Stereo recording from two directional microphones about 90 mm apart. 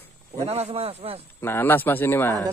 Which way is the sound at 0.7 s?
90° right.